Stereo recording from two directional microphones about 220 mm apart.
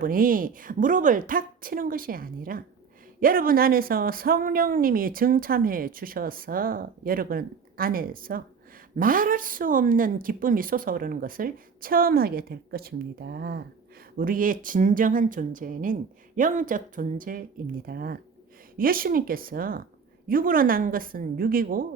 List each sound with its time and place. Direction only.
0.0 s speech: 40° right (ahead or behind)